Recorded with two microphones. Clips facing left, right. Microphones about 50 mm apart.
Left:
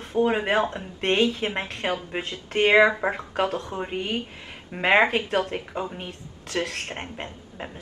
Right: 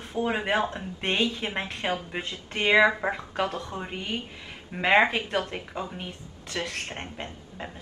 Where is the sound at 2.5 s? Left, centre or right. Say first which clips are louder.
Left 3 dB; left.